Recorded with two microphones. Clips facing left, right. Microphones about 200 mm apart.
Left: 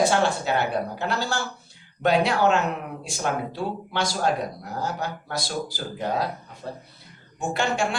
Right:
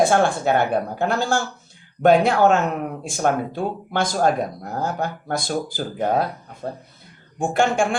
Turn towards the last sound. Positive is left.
turn(degrees=-50)  # may be behind; listen again after turning